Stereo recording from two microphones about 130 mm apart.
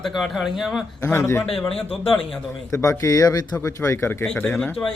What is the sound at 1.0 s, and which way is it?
Speech, 20° left (ahead or behind).